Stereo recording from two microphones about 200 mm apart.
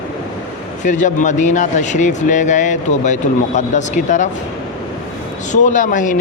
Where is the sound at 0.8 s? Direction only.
40° left (ahead or behind).